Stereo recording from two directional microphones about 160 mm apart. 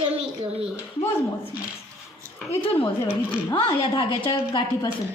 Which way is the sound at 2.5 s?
35° left (ahead or behind).